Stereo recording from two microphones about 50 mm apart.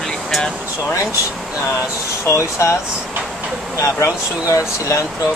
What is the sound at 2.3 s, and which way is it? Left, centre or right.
Speech, left.